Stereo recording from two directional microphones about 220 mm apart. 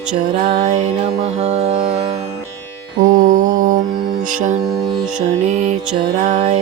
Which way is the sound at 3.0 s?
40° right (ahead or behind).